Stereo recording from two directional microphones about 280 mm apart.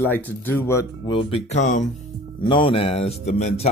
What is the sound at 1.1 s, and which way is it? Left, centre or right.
Speech, left.